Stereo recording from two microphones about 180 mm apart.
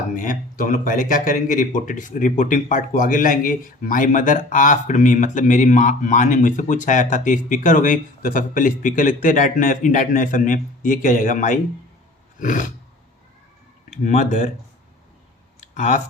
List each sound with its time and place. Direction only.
0.1 s speech: 50° left (ahead or behind)
13.9 s speech: 40° left (ahead or behind)
15.7 s speech: 45° left (ahead or behind)